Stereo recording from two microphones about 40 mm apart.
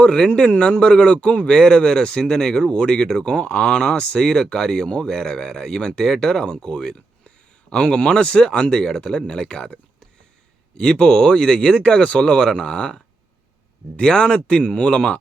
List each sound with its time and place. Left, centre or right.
0.0 s speech: centre
10.8 s speech: left
12.2 s speech: centre
13.9 s speech: left